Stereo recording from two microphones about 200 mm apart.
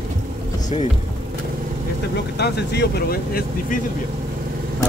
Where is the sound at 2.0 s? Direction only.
55° left (ahead or behind).